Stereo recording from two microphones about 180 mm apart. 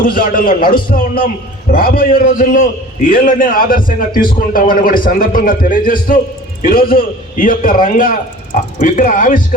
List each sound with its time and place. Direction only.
0.0 s speech: 50° left (ahead or behind)